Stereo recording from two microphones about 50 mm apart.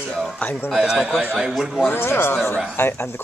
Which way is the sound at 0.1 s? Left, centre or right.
Centre.